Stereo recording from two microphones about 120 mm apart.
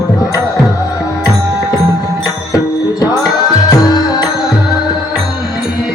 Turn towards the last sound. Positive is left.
turn(degrees=35)  # may be behind; listen again after turning